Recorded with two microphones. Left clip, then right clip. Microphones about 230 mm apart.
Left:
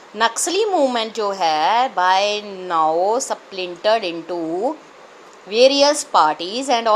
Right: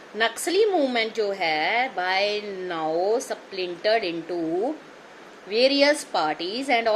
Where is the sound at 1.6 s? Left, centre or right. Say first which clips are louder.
Left 8 dB; left.